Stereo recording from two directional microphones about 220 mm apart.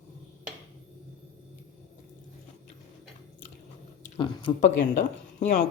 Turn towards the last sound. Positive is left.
turn(degrees=35)  # may be behind; listen again after turning